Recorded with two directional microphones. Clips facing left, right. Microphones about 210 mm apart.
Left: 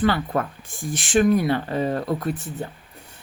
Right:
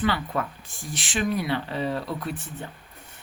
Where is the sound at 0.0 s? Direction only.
45° left (ahead or behind).